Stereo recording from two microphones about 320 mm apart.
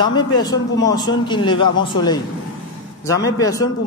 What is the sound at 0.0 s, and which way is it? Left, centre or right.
A man's voice, centre.